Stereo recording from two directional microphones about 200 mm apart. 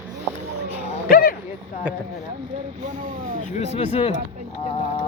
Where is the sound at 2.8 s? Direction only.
40° right (ahead or behind).